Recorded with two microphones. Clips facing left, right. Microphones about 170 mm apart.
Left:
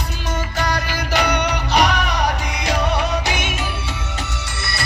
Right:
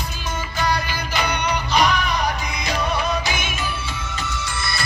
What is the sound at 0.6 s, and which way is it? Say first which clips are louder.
Music: right 2 dB; 70° left (ahead or behind).